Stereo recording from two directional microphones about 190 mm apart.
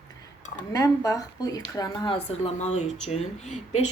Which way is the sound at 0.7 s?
15° left (ahead or behind).